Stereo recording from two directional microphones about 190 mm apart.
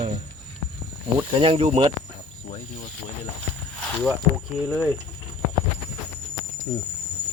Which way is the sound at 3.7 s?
5° left (ahead or behind).